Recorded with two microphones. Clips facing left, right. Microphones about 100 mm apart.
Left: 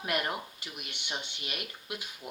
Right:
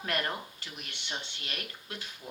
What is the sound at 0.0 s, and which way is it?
Speech, 15° left (ahead or behind).